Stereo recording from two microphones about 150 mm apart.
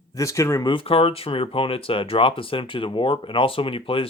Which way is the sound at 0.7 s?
35° left (ahead or behind).